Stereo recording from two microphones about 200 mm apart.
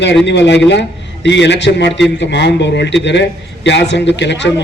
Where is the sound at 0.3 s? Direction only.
60° left (ahead or behind).